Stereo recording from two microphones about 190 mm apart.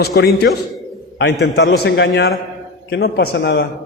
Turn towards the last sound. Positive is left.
turn(degrees=60)  # may be behind; listen again after turning